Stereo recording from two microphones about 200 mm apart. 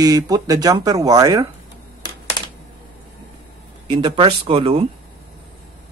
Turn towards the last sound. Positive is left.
turn(degrees=-30)  # may be behind; listen again after turning